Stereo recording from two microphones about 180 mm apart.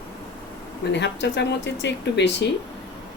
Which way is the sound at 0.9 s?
75° left (ahead or behind).